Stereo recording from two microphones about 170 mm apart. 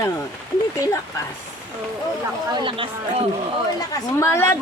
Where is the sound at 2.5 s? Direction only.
30° right (ahead or behind).